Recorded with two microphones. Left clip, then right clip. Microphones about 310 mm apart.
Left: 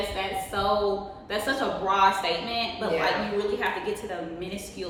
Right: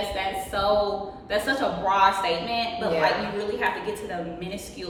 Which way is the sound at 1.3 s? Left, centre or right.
Centre.